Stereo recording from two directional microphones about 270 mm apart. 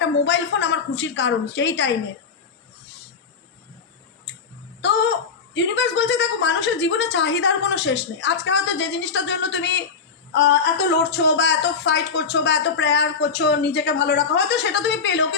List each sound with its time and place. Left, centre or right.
0.0 s speech: left
4.3 s a sound: left
5.7 s speech: left